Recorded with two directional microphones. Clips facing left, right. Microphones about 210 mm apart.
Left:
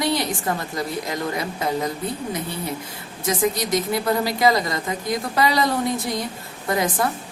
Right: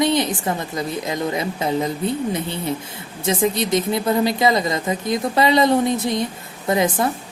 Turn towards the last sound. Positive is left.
turn(degrees=-25)  # may be behind; listen again after turning